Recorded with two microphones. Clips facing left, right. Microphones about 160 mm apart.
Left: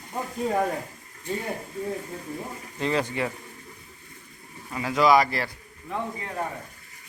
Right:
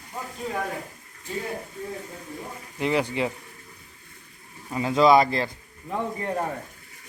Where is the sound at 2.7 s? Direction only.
15° right (ahead or behind).